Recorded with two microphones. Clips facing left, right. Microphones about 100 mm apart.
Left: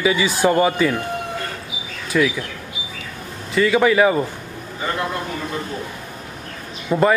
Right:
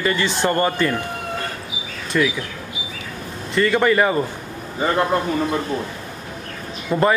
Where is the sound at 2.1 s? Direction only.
Centre (ahead or behind).